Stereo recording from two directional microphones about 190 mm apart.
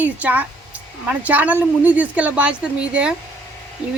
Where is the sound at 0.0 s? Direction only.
10° right (ahead or behind).